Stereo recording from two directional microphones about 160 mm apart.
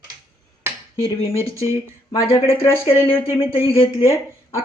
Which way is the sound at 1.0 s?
35° left (ahead or behind).